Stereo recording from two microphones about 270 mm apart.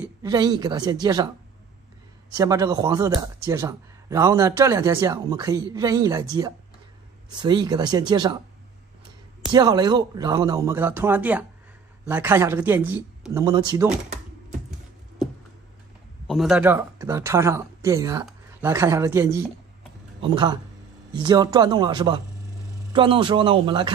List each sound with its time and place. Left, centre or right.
0.0 s speech: centre
2.3 s speech: centre
7.4 s speech: centre
9.5 s speech: centre
16.3 s speech: centre